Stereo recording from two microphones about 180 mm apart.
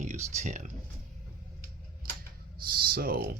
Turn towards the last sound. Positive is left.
turn(degrees=-55)  # may be behind; listen again after turning